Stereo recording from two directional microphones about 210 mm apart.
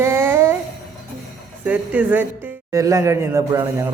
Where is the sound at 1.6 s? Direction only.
5° right (ahead or behind).